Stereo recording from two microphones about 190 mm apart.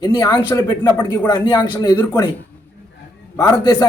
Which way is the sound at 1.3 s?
25° left (ahead or behind).